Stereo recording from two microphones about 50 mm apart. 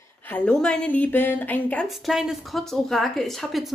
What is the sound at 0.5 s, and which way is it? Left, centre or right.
Speech, centre.